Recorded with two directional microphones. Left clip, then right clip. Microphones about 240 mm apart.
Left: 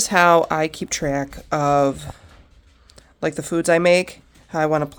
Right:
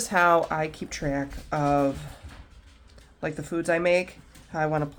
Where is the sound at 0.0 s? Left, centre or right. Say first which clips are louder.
Left 6 dB; left.